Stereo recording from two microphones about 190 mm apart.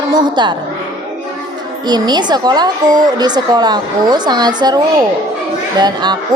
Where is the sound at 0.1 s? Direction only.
25° right (ahead or behind).